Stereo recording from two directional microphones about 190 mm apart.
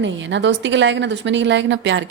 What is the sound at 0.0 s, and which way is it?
A woman's voice, 70° right (ahead or behind).